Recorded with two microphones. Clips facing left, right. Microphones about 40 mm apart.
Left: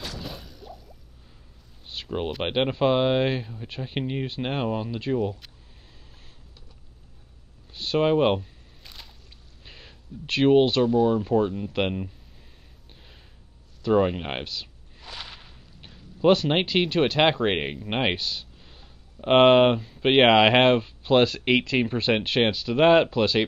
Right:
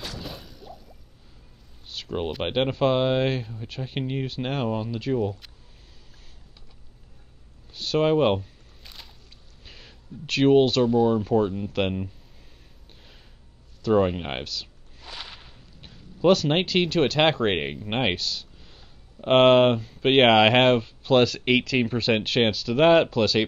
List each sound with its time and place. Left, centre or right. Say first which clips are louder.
0.0 s a sound: even; centre
1.9 s a sound: even; centre
2.1 s speech: even; centre
2.5 s speech: even; centre
7.7 s a sound: even; centre
9.7 s speech: even; centre
13.8 s speech: even; centre
14.4 s speech: even; centre
15.0 s speech: even; centre